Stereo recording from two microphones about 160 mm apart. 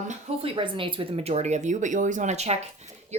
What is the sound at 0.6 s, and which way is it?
Speech, 30° right (ahead or behind).